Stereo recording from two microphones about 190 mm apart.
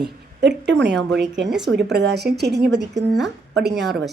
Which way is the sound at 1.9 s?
60° right (ahead or behind).